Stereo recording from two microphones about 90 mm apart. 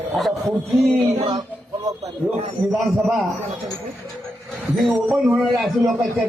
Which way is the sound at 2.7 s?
Centre (ahead or behind).